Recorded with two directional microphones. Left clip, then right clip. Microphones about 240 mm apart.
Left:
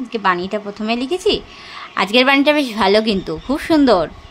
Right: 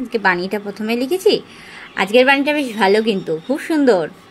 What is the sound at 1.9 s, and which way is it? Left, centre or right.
A woman's voice, centre.